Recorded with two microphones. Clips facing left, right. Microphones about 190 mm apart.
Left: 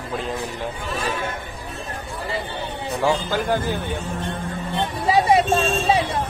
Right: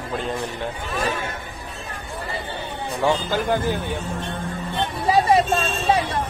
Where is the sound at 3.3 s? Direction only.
15° right (ahead or behind).